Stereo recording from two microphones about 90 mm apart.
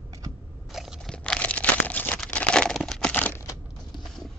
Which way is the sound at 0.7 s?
Centre (ahead or behind).